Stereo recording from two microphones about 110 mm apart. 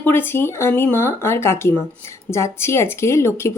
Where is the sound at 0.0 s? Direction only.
20° left (ahead or behind).